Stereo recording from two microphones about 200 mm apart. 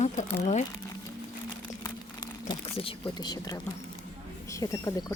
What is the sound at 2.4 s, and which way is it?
A woman's voice, 25° left (ahead or behind).